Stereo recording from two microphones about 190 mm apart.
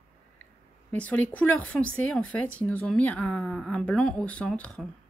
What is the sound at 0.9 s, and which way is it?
Speech, 10° left (ahead or behind).